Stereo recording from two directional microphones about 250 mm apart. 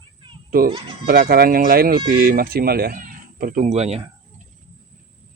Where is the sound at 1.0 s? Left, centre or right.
Right.